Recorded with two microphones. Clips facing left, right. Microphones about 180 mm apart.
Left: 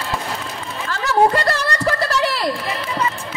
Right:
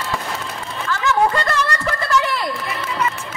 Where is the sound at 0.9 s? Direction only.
35° left (ahead or behind).